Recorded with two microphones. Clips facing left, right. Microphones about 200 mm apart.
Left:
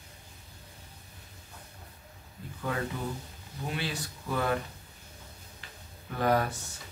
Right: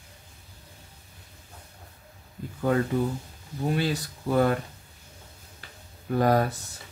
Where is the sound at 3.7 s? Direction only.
40° right (ahead or behind).